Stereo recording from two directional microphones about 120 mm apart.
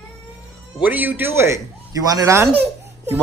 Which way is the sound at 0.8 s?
15° right (ahead or behind).